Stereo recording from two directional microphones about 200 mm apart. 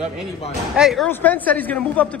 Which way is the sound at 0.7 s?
Centre (ahead or behind).